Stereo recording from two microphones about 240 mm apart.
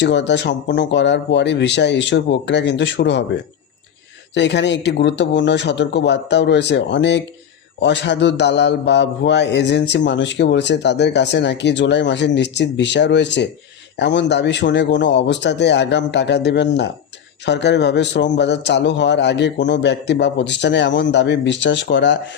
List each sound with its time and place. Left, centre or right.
0.0 s a man's voice: left
4.4 s a man's voice: left